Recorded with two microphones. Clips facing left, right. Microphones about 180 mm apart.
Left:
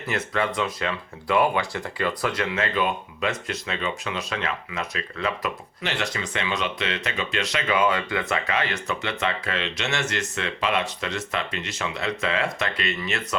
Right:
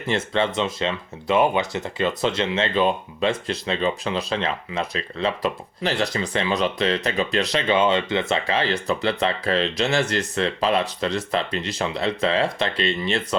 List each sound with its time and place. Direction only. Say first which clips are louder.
0.1 s speech: right 4 dB; 25° right (ahead or behind)